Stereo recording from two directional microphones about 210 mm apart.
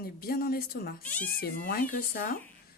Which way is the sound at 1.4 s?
45° left (ahead or behind).